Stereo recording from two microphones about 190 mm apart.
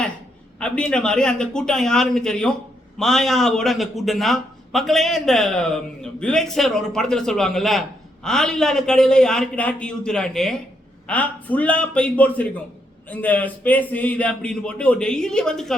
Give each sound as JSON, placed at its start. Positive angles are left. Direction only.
{"t": 0.6, "sound": "a man's voice", "side_deg": 5}